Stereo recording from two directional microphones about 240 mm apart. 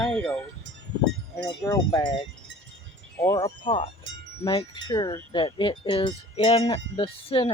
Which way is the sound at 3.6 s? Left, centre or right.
Left.